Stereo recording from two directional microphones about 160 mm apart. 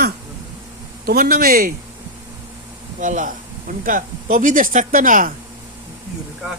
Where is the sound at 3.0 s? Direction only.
50° right (ahead or behind).